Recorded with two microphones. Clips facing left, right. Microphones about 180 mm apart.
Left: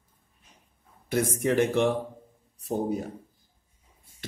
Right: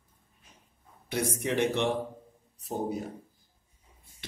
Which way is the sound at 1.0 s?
50° left (ahead or behind).